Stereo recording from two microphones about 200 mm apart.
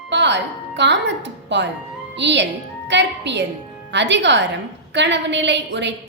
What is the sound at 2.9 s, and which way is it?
Music, 60° right (ahead or behind).